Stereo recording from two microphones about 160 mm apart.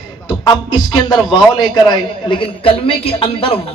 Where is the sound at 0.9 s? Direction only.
30° left (ahead or behind).